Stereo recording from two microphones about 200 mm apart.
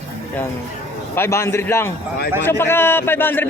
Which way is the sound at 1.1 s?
10° left (ahead or behind).